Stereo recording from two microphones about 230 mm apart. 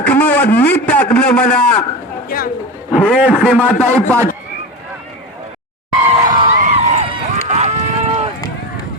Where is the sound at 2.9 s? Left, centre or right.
Centre.